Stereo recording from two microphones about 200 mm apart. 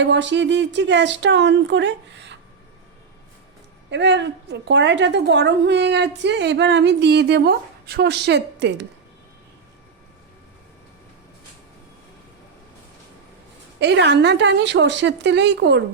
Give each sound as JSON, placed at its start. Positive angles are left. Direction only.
{"t": 0.0, "sound": "a woman's voice", "side_deg": -65}
{"t": 3.8, "sound": "a woman's voice", "side_deg": -60}
{"t": 13.7, "sound": "a woman's voice", "side_deg": -60}